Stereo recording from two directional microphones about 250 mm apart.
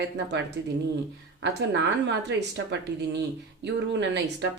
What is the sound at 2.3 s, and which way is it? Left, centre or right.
Speech, right.